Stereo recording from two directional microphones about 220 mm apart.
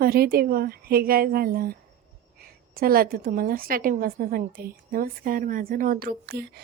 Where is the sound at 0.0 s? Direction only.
45° right (ahead or behind).